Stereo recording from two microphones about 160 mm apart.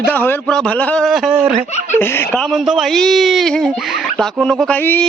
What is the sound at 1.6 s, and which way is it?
Speech, 45° left (ahead or behind).